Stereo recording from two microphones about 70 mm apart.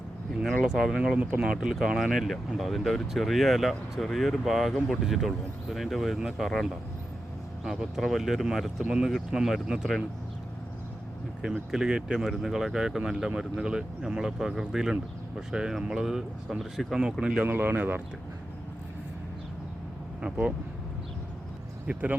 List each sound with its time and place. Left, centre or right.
0.6 s speech: centre
11.7 s speech: centre
17.4 s speech: right
20.2 s speech: centre
21.8 s speech: right